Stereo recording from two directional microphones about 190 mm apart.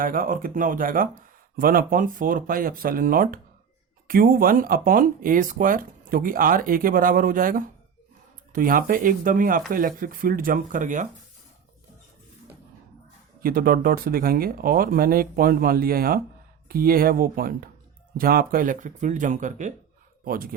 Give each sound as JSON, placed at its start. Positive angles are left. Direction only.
{"t": 0.0, "sound": "speech", "side_deg": -50}
{"t": 13.4, "sound": "speech", "side_deg": -50}